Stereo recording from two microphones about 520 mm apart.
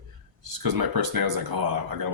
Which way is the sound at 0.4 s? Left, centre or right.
Right.